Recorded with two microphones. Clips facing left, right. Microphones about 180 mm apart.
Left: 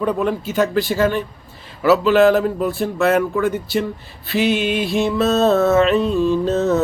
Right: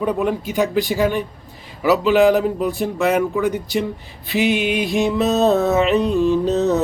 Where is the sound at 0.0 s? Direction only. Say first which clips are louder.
Even; 15° right (ahead or behind).